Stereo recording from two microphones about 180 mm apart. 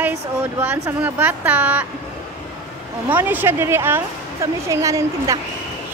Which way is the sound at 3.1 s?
10° right (ahead or behind).